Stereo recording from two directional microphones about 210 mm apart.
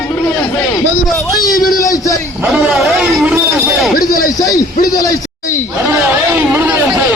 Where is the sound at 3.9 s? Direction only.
45° left (ahead or behind).